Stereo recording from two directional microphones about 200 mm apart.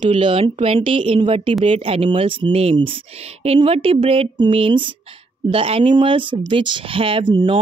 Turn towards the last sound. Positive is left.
turn(degrees=-25)  # may be behind; listen again after turning